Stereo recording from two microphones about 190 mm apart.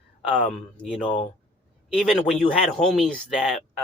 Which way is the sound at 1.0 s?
25° left (ahead or behind).